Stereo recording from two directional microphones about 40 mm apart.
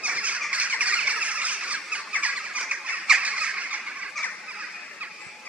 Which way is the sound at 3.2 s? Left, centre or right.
Right.